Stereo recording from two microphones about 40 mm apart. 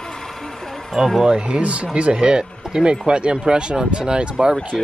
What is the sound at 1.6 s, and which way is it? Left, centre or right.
Speech, right.